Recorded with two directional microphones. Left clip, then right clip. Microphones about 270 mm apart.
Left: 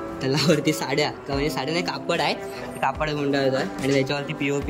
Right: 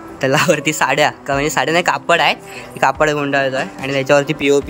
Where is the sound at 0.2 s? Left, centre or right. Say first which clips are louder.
Right 8 dB; centre.